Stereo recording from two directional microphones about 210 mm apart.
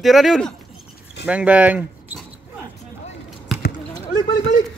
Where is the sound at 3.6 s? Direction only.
45° left (ahead or behind).